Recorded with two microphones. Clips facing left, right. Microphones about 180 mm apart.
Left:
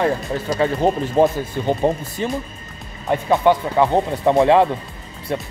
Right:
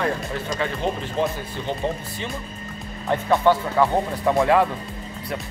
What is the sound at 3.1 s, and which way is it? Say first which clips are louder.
Speech: left 3 dB; 20° left (ahead or behind).